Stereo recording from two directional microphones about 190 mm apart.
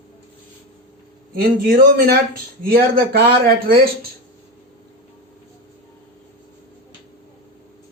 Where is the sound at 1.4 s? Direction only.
50° right (ahead or behind).